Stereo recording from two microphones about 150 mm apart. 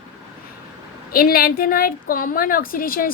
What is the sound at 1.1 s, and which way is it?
A woman's voice, 80° left.